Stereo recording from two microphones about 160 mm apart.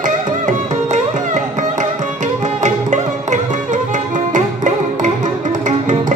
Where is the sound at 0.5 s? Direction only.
50° right (ahead or behind).